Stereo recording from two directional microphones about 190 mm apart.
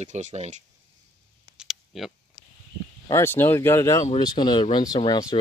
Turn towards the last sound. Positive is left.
turn(degrees=25)  # may be behind; listen again after turning